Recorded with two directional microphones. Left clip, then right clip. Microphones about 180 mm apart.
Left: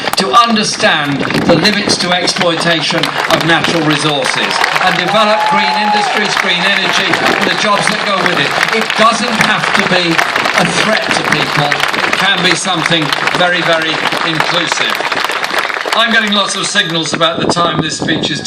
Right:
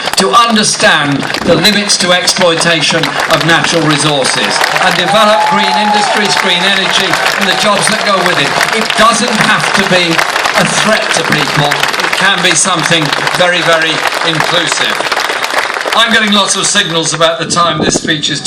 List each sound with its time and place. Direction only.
0.2 s speech: 20° right (ahead or behind)
16.0 s speech: 15° right (ahead or behind)